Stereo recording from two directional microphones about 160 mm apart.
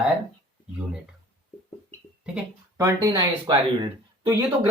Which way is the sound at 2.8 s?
20° right (ahead or behind).